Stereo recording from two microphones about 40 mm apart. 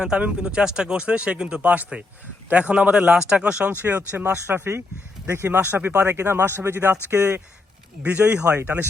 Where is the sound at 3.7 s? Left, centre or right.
Right.